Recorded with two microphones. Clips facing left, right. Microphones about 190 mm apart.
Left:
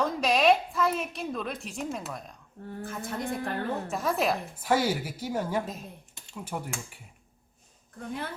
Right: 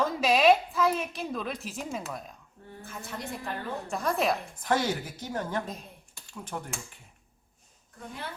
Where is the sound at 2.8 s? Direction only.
55° left (ahead or behind).